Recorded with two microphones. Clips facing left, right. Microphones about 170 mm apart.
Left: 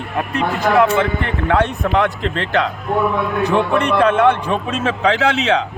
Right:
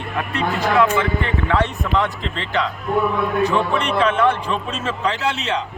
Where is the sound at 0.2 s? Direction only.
45° left (ahead or behind).